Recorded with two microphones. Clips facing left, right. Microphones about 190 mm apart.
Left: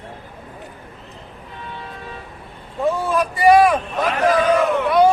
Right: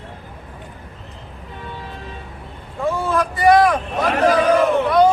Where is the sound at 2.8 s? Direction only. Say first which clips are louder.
Left 1 dB; 15° left (ahead or behind).